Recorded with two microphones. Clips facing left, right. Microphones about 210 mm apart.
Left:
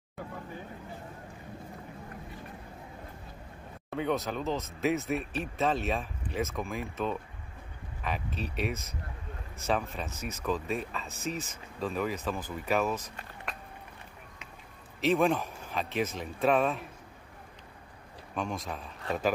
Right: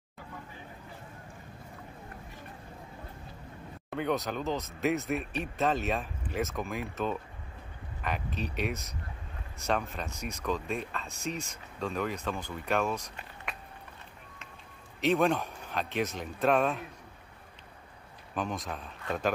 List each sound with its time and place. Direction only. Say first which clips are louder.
3.9 s speech: even; centre (ahead or behind)
15.0 s speech: even; centre (ahead or behind)
18.3 s speech: even; centre (ahead or behind)